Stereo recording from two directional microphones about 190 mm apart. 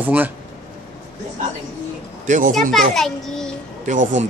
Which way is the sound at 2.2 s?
40° right (ahead or behind).